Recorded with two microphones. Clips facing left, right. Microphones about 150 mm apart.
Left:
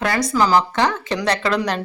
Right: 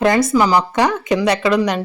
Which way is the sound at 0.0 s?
25° right (ahead or behind).